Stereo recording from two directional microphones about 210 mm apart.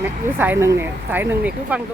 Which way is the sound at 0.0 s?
10° right (ahead or behind).